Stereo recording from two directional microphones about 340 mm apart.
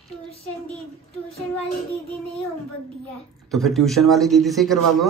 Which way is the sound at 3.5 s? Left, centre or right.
Centre.